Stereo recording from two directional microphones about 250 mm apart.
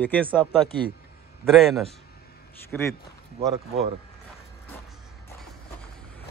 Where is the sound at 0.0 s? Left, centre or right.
Centre.